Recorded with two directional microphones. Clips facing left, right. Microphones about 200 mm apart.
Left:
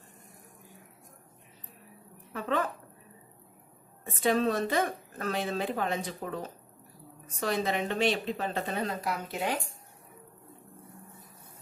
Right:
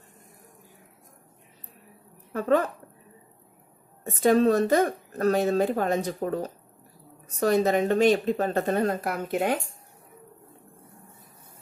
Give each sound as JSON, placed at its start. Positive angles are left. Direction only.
{"t": 2.3, "sound": "speech", "side_deg": -45}
{"t": 4.0, "sound": "speech", "side_deg": -45}